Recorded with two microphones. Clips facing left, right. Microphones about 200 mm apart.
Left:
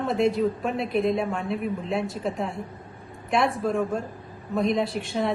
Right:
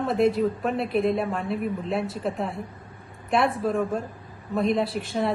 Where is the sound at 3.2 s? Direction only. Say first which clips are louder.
Right 1 dB; 5° right (ahead or behind).